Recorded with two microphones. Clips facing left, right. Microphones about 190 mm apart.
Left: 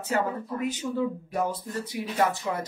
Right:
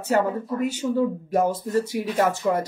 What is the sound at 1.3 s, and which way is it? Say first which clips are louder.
Speech: right 8 dB; 45° right (ahead or behind).